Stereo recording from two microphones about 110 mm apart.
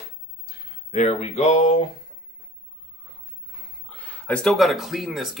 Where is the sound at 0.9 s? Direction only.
85° left.